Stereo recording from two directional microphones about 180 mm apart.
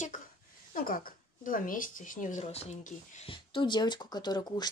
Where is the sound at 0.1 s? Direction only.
50° left (ahead or behind).